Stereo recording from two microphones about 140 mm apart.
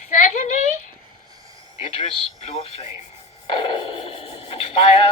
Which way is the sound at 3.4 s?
40° left (ahead or behind).